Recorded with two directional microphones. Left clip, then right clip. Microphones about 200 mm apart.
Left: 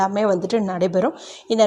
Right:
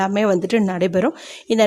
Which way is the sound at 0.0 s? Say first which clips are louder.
Right 1 dB; 25° right (ahead or behind).